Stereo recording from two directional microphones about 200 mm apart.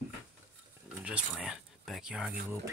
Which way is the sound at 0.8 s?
5° right (ahead or behind).